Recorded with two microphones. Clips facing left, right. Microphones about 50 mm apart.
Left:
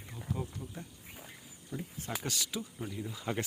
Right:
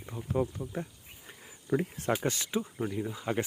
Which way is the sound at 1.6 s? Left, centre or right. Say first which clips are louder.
Right 12 dB; right.